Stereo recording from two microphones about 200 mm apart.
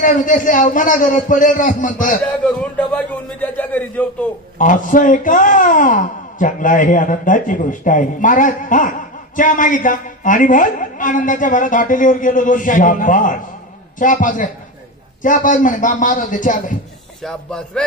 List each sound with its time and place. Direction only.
0.0 s speech: 40° left (ahead or behind)
2.4 s a man's voice: 5° left (ahead or behind)
4.6 s speech: 40° left (ahead or behind)
17.2 s speech: 5° left (ahead or behind)